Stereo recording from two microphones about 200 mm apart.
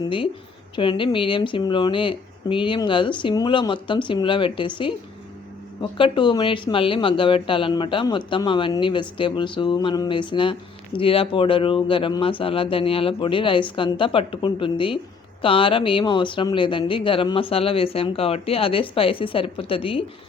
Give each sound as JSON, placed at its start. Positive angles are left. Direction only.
{"t": 0.0, "sound": "speech", "side_deg": 25}